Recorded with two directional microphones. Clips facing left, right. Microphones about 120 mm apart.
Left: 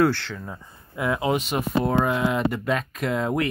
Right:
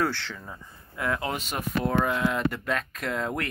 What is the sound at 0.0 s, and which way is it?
Speech, 10° left (ahead or behind).